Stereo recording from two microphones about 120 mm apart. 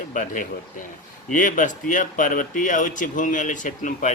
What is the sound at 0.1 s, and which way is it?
Speech, 90° left.